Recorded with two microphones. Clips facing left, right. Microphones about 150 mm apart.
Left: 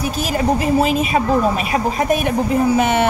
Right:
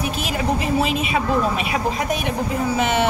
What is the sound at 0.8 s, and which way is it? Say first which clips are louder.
A woman's voice: left 4 dB; 40° left (ahead or behind).